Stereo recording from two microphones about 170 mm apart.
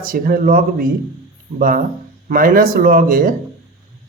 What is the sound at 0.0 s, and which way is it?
Speech, 55° right (ahead or behind).